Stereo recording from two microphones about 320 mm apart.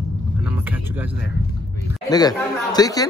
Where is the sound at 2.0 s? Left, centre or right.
Centre.